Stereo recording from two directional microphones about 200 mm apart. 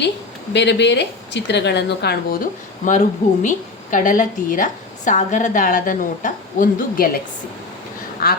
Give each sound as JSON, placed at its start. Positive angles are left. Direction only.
{"t": 0.5, "sound": "a woman's voice", "side_deg": 60}
{"t": 8.2, "sound": "speech", "side_deg": 50}